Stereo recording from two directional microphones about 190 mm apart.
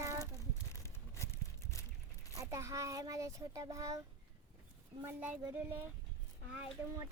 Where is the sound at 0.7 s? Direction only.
15° left (ahead or behind).